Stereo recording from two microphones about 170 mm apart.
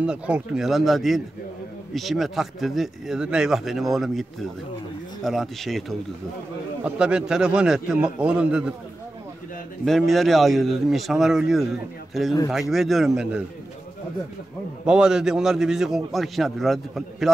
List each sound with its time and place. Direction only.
0.0 s speech: 5° right (ahead or behind)
9.8 s speech: centre (ahead or behind)
14.9 s speech: 5° right (ahead or behind)